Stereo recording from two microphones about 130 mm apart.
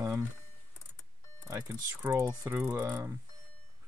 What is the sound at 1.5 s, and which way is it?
Speech, 20° right (ahead or behind).